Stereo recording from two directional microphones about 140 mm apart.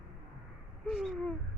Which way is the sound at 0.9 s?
Centre (ahead or behind).